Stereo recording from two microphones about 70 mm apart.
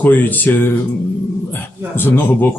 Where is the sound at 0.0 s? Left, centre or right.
Left.